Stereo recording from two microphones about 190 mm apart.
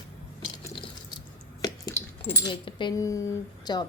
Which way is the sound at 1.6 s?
15° left (ahead or behind).